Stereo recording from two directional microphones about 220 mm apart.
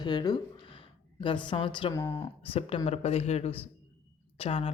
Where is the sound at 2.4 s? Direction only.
25° left (ahead or behind).